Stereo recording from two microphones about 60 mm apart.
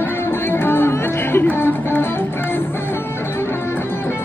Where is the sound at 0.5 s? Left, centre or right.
Left.